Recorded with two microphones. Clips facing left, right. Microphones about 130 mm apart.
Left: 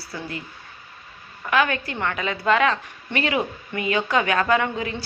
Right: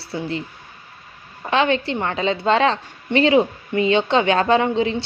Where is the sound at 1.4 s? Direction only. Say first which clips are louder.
Right 3 dB; 25° right (ahead or behind).